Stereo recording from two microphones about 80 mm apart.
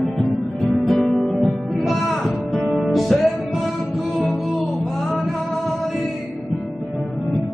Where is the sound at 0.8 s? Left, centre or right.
Centre.